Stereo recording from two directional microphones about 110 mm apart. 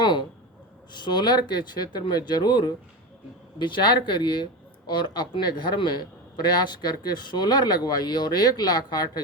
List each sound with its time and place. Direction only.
0.0 s speech: 45° left (ahead or behind)